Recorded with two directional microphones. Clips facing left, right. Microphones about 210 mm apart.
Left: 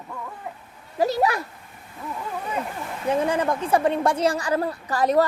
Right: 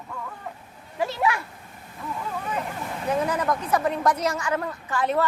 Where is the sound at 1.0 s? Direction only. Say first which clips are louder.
Left 4 dB; 40° left (ahead or behind).